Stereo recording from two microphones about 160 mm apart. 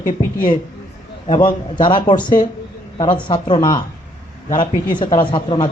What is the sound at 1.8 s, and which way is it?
Speech, 30° left (ahead or behind).